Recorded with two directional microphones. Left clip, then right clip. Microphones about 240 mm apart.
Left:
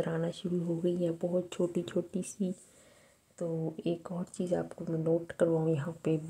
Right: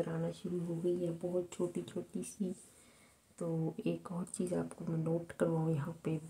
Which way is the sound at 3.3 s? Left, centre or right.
Centre.